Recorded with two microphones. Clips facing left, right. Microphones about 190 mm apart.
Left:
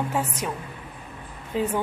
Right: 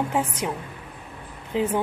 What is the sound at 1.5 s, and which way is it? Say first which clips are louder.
Speech: right 1 dB; 20° right (ahead or behind).